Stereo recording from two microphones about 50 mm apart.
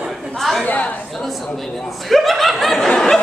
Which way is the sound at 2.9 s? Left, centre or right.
Centre.